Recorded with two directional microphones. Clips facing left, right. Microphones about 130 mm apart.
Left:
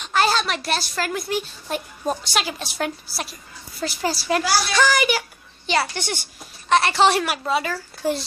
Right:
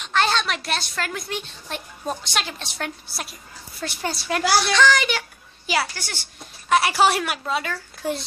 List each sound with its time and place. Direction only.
0.0 s a woman's voice: 5° left (ahead or behind)
5.9 s speech: 20° left (ahead or behind)
6.7 s a woman's voice: 10° right (ahead or behind)